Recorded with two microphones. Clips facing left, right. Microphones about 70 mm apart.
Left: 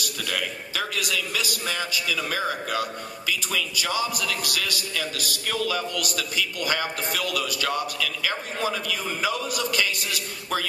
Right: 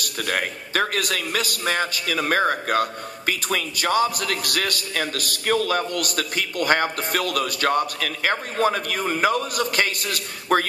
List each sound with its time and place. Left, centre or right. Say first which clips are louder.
0.0 s a man's voice: right 4 dB; right